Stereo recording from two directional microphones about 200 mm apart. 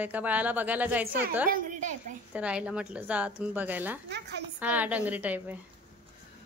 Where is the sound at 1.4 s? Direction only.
40° right (ahead or behind).